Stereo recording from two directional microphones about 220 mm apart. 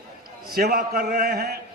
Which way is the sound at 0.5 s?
40° right (ahead or behind).